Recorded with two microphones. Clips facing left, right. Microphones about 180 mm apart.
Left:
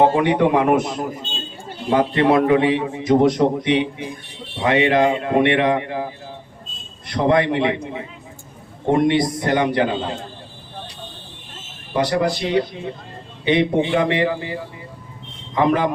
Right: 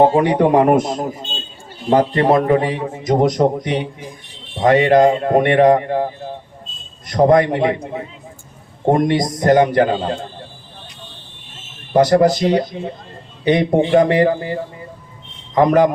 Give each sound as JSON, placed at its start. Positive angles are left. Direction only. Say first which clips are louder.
{"t": 0.2, "sound": "a man's voice", "louder": "right 3 dB", "side_deg": -40}
{"t": 7.1, "sound": "a man's voice", "louder": "right 5 dB", "side_deg": -40}
{"t": 11.9, "sound": "a man's voice", "louder": "right 7 dB", "side_deg": -40}